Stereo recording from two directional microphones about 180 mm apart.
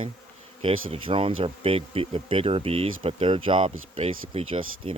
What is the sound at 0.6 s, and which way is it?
Speech, 30° right (ahead or behind).